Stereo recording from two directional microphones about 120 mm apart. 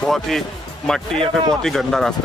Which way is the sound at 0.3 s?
Centre (ahead or behind).